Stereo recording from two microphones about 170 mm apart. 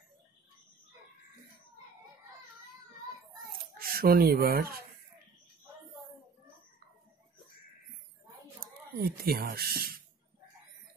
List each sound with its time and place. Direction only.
3.5 s a child's voice: 60° right (ahead or behind)
8.5 s speech: 65° right (ahead or behind)